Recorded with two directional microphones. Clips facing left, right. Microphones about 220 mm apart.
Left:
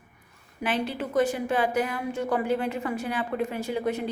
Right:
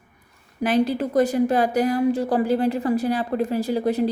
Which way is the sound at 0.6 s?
40° right (ahead or behind).